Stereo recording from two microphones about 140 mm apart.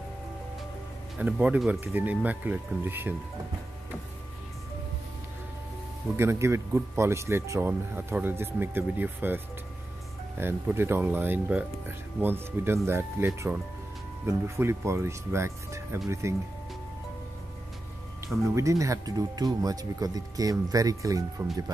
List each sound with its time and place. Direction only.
1.1 s speech: 10° right (ahead or behind)
6.1 s speech: 20° right (ahead or behind)
18.3 s speech: 20° right (ahead or behind)